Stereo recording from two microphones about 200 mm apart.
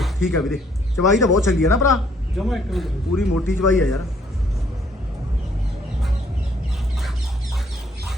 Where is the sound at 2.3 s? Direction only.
Centre (ahead or behind).